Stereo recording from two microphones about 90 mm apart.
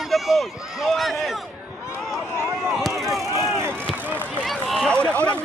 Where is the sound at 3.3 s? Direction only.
35° right (ahead or behind).